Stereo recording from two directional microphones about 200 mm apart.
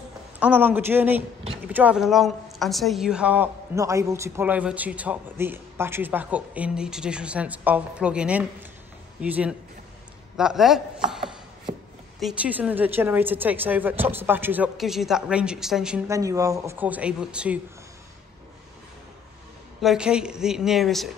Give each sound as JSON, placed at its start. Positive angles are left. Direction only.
{"t": 0.4, "sound": "a woman's voice", "side_deg": -10}
{"t": 11.7, "sound": "chopping", "side_deg": -35}
{"t": 12.2, "sound": "a woman's voice", "side_deg": -5}
{"t": 16.1, "sound": "a woman's voice", "side_deg": -15}
{"t": 19.8, "sound": "a woman's voice", "side_deg": -5}